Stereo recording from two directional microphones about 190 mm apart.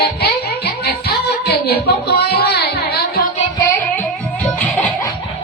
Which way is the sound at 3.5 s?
10° left (ahead or behind).